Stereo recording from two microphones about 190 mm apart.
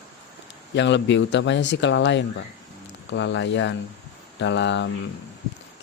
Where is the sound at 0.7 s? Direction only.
70° left (ahead or behind).